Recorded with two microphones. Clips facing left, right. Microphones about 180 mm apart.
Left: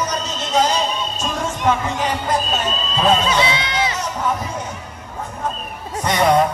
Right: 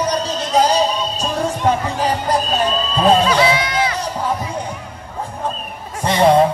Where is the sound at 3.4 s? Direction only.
25° left (ahead or behind).